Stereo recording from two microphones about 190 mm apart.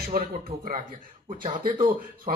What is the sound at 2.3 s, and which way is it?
Speech, 35° right (ahead or behind).